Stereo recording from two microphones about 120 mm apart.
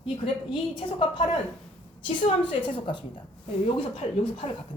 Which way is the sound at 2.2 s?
45° left (ahead or behind).